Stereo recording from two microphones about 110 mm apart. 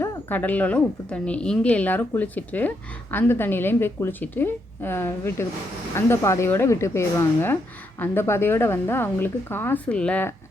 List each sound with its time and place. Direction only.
0.3 s a woman's voice: 15° left (ahead or behind)